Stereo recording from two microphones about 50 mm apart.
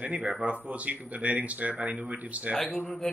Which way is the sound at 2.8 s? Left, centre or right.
Centre.